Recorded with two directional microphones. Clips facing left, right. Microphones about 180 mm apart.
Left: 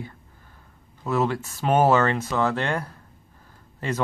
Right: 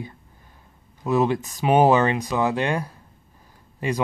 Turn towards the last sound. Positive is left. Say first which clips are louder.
# right 3 dB
turn(degrees=-15)  # may be behind; listen again after turning